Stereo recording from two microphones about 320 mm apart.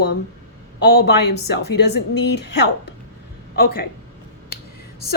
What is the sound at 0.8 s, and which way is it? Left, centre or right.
A woman's voice, left.